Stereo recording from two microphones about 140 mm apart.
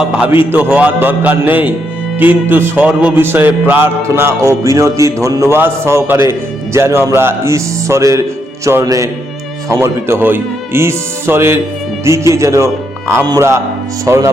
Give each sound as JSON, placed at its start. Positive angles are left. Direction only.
{"t": 0.5, "sound": "music", "side_deg": -10}
{"t": 7.2, "sound": "speech", "side_deg": -20}
{"t": 9.6, "sound": "music", "side_deg": -20}
{"t": 12.0, "sound": "speech", "side_deg": -20}